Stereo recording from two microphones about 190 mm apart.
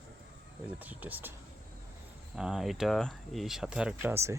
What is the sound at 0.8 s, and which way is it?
Speech, 10° right (ahead or behind).